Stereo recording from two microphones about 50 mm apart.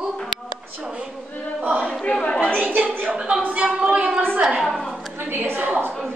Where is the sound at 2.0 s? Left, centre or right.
Left.